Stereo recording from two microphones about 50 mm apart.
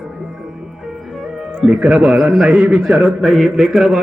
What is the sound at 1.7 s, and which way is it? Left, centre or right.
Speech, right.